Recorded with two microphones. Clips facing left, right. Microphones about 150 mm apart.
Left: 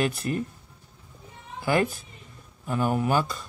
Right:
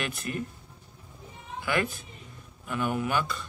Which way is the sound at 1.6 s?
35° left (ahead or behind).